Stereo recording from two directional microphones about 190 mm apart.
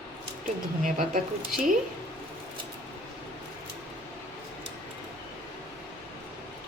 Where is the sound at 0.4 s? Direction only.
45° right (ahead or behind).